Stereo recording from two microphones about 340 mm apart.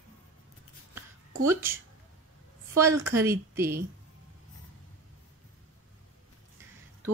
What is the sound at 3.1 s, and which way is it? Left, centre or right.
Speech, centre.